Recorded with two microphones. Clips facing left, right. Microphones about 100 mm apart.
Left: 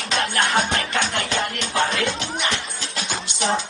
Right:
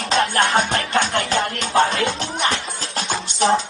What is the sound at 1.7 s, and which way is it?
Music, 40° right (ahead or behind).